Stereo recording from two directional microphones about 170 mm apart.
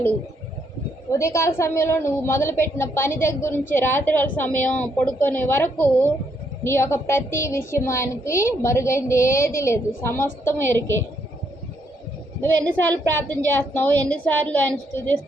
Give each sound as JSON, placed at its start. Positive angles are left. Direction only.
{"t": 1.1, "sound": "a woman's voice", "side_deg": 15}
{"t": 10.7, "sound": "a woman's voice", "side_deg": -90}
{"t": 12.6, "sound": "a woman's voice", "side_deg": 10}